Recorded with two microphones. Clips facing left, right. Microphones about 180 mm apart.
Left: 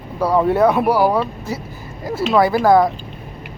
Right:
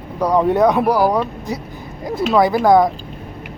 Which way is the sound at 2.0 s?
5° left (ahead or behind).